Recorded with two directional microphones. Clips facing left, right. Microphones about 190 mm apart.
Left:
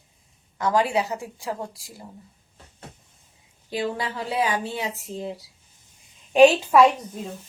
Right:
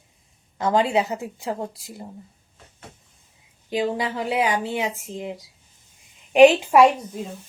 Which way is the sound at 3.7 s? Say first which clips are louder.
Right 3 dB; 15° right (ahead or behind).